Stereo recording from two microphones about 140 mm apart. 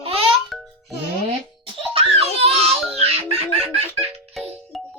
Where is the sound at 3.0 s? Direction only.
45° right (ahead or behind).